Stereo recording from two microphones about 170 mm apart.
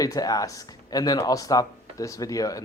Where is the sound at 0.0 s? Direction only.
20° left (ahead or behind).